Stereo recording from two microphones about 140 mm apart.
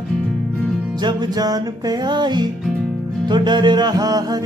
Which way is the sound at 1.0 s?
30° right (ahead or behind).